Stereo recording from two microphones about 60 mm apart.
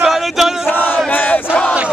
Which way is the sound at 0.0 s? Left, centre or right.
Centre.